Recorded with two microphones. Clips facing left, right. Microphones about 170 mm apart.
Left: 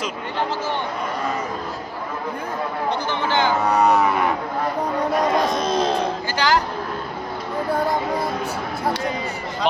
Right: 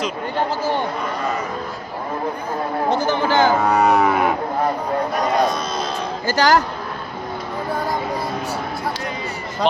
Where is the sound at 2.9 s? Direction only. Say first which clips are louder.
Right 5 dB; 40° right (ahead or behind).